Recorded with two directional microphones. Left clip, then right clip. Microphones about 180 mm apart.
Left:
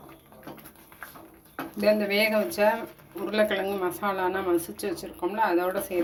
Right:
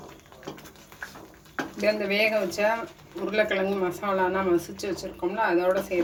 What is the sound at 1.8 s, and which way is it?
Speech, 40° left (ahead or behind).